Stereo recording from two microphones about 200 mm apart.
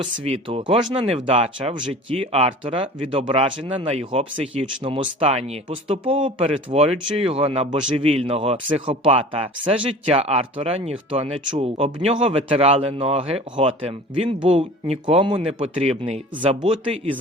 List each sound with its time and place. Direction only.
0.0 s speech: 25° right (ahead or behind)